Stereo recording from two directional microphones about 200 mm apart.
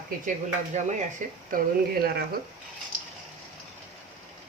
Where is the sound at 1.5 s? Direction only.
45° right (ahead or behind).